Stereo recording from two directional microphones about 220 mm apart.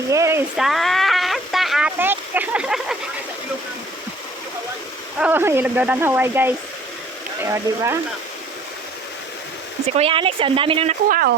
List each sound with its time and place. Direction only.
0.1 s a sound: 15° right (ahead or behind)
5.2 s speech: 10° right (ahead or behind)
9.9 s speech: 25° right (ahead or behind)
11.1 s speech: 40° right (ahead or behind)